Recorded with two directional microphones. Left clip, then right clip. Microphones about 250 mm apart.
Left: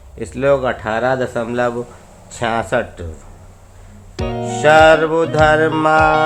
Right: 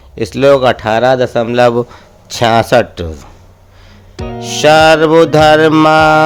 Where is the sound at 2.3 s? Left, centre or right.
Right.